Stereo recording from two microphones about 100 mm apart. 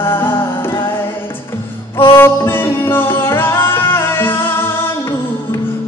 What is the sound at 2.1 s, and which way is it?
Music, 20° left (ahead or behind).